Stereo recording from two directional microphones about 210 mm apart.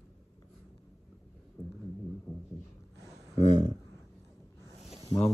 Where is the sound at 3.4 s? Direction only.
35° left (ahead or behind).